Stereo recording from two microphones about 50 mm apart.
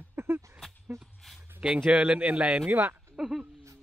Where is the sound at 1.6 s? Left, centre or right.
Centre.